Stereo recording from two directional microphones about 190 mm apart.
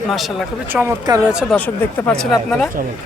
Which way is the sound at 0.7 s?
15° right (ahead or behind).